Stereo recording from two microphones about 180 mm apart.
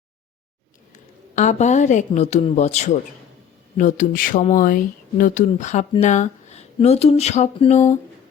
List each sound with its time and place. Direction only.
0.9 s speech: 40° left (ahead or behind)